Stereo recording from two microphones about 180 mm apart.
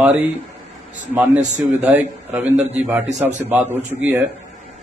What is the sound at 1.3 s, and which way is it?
Speech, 40° right (ahead or behind).